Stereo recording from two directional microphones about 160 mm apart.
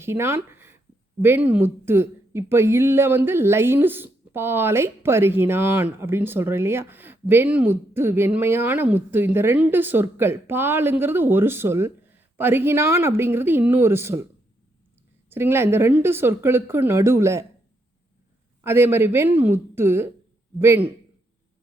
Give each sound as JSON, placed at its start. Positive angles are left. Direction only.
{"t": 0.0, "sound": "a woman's voice", "side_deg": -15}
{"t": 15.3, "sound": "a woman's voice", "side_deg": -15}
{"t": 18.6, "sound": "a woman's voice", "side_deg": -15}